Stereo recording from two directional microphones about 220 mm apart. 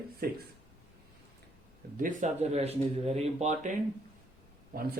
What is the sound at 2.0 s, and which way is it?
Speech, 35° right (ahead or behind).